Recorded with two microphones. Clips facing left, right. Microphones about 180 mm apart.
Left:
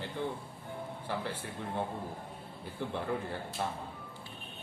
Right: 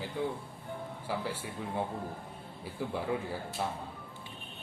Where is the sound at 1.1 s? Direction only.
5° right (ahead or behind).